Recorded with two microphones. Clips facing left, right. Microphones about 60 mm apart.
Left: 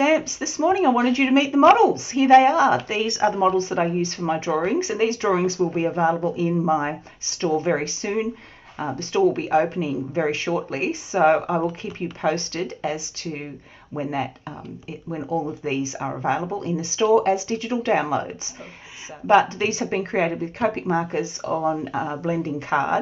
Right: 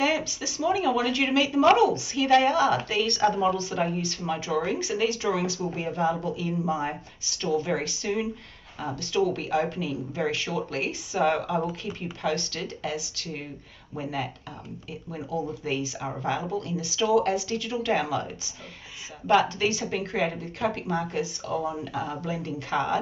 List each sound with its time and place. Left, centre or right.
0.0 s a woman's voice: left